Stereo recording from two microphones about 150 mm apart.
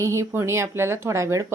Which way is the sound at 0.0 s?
20° right (ahead or behind).